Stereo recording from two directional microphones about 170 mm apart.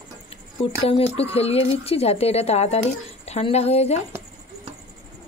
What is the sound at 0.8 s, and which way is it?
A woman's voice, 35° left (ahead or behind).